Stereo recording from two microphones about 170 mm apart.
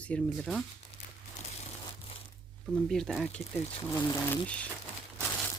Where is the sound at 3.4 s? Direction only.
35° left (ahead or behind).